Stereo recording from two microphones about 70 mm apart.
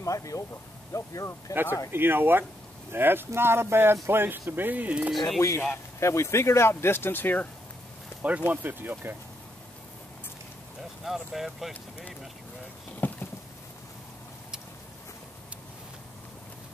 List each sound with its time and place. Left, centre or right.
0.0 s speech: left
1.5 s speech: right
5.9 s speech: left
8.2 s speech: centre
11.1 s speech: centre
13.0 s a sound: left